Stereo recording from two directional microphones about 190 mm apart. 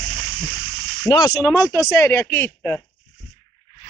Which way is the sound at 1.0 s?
20° left (ahead or behind).